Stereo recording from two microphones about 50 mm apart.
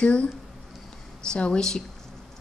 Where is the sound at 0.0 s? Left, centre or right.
Left.